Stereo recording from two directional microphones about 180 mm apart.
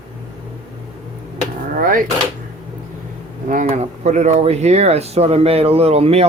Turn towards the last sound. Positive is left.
turn(degrees=-35)  # may be behind; listen again after turning